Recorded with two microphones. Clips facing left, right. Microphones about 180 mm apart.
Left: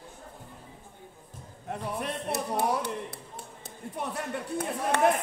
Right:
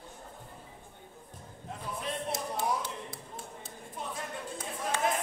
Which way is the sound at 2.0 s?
65° left (ahead or behind).